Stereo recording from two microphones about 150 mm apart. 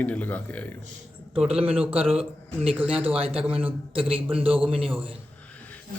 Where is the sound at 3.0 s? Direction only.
40° right (ahead or behind).